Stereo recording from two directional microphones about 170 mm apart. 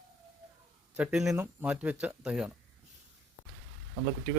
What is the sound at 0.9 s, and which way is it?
Speech, 5° right (ahead or behind).